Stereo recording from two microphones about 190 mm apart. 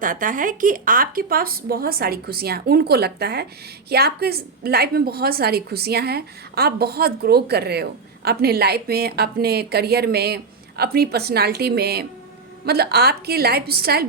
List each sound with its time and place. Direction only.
0.0 s a woman's voice: 45° right (ahead or behind)